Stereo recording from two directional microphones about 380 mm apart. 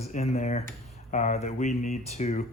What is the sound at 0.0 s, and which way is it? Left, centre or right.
Speech, centre.